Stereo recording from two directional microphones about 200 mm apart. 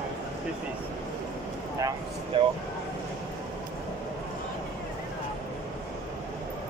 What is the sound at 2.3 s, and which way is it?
Speech, 25° right (ahead or behind).